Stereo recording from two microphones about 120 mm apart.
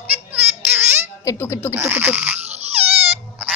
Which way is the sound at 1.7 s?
20° right (ahead or behind).